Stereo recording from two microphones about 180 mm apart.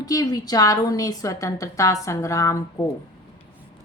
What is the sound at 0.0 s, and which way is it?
A woman's voice, 20° left (ahead or behind).